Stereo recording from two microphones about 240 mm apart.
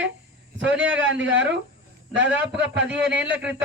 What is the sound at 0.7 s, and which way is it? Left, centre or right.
Speech, centre.